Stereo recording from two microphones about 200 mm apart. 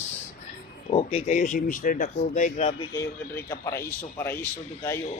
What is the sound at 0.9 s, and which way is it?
A man's voice, 30° left (ahead or behind).